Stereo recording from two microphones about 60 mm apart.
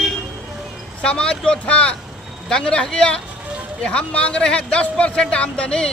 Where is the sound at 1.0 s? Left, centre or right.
Centre.